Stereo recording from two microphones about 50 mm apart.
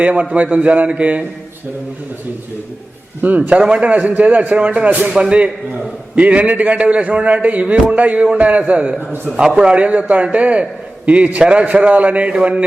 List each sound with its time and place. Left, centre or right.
0.0 s a man's voice: right
3.2 s a man's voice: right
3.6 s a man's voice: right